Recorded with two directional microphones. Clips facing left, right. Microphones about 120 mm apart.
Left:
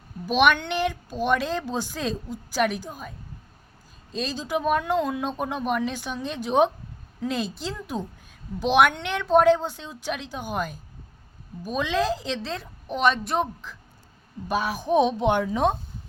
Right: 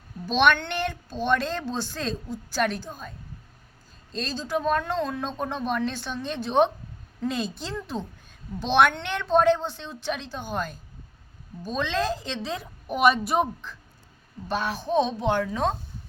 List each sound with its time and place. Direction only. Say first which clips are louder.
0.3 s a woman's voice: left 1 dB; 10° left (ahead or behind)
4.1 s a woman's voice: left 1 dB; 5° left (ahead or behind)
14.4 s a woman's voice: left 2 dB; 10° left (ahead or behind)